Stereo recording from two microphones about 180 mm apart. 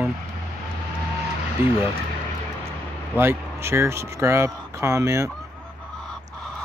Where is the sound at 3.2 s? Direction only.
15° right (ahead or behind).